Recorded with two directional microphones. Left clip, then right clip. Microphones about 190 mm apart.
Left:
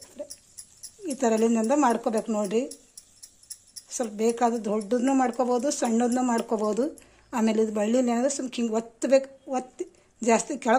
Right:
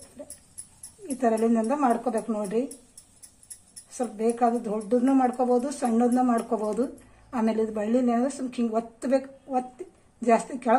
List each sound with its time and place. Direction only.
1.0 s speech: 40° left (ahead or behind)
3.9 s speech: 40° left (ahead or behind)